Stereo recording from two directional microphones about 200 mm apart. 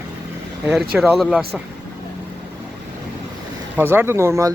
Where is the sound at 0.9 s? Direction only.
5° right (ahead or behind).